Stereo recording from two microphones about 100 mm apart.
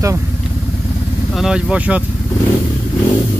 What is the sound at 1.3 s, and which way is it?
Speech, 5° right (ahead or behind).